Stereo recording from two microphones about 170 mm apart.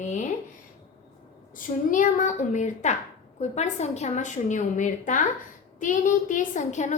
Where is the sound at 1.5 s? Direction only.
50° left (ahead or behind).